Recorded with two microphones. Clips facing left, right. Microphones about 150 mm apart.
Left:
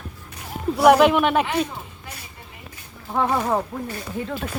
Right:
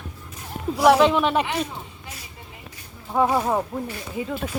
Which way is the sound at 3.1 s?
10° right (ahead or behind).